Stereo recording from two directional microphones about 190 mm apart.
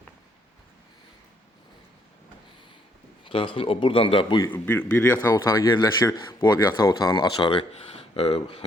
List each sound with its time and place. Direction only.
3.2 s a man's voice: 25° left (ahead or behind)
4.5 s a man's voice: 10° left (ahead or behind); by 8.4 s 30° left (ahead or behind)